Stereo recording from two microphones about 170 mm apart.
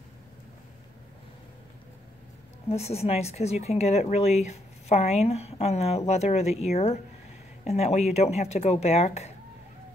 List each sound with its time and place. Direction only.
2.7 s speech: 35° left (ahead or behind)